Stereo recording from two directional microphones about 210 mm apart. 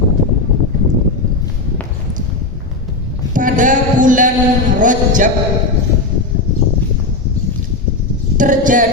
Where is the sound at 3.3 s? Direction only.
40° right (ahead or behind).